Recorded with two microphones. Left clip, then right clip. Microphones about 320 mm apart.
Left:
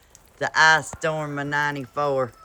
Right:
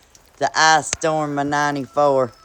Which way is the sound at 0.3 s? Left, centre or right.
Centre.